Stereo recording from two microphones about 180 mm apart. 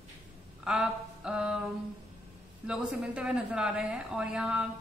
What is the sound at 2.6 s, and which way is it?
A woman's voice, 5° right (ahead or behind).